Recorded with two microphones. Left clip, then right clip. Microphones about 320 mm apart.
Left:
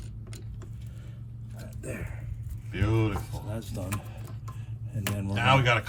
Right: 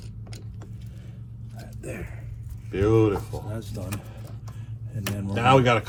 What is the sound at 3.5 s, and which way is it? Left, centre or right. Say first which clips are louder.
Speech: right 1 dB; centre.